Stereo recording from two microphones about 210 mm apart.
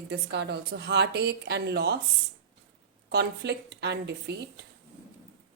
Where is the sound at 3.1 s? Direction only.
55° right (ahead or behind).